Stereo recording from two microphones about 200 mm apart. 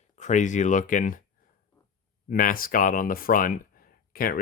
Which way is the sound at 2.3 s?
45° left (ahead or behind).